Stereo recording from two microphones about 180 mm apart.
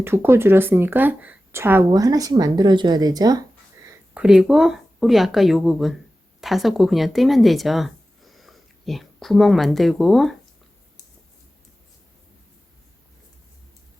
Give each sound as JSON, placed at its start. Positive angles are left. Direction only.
{"t": 0.0, "sound": "speech", "side_deg": -15}
{"t": 4.1, "sound": "speech", "side_deg": -5}